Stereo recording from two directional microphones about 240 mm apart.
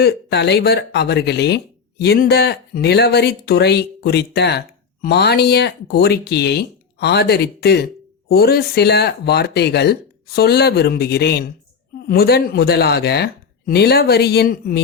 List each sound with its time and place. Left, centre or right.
0.0 s speech: left